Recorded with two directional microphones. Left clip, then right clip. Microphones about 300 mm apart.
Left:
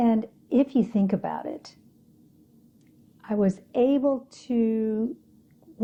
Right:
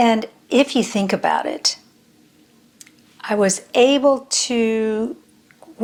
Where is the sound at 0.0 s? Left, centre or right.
Centre.